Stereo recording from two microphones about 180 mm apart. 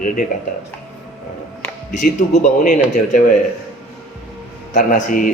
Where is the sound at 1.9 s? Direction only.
45° left (ahead or behind).